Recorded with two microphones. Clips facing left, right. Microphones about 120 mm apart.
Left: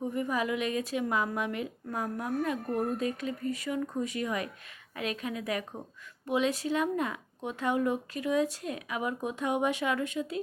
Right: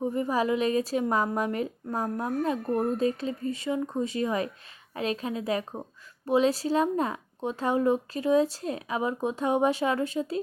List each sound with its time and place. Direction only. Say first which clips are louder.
0.0 s a woman's voice: right 4 dB; 30° right (ahead or behind)